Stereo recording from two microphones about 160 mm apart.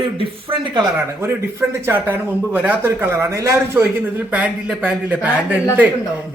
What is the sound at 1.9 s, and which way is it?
A man's voice, 10° right (ahead or behind).